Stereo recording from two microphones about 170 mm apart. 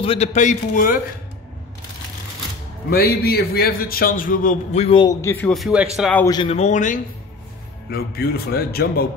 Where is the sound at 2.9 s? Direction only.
65° left (ahead or behind); by 5.0 s 40° left (ahead or behind).